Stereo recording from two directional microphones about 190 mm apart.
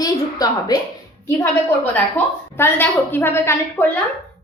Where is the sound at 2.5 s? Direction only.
10° left (ahead or behind).